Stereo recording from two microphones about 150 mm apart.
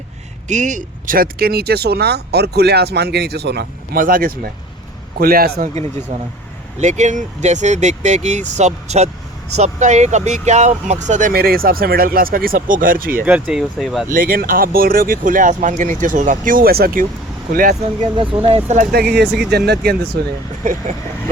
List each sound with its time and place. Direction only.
0.4 s speech: 55° right (ahead or behind); by 4.5 s 75° right (ahead or behind)
5.2 s a man's voice: 85° right
6.7 s speech: 50° right (ahead or behind); by 13.2 s 70° right (ahead or behind)
13.2 s speech: 5° right (ahead or behind)
14.1 s speech: 75° right (ahead or behind)
17.5 s speech: 70° right (ahead or behind)
18.4 s speech: 40° right (ahead or behind)
18.8 s speech: 80° right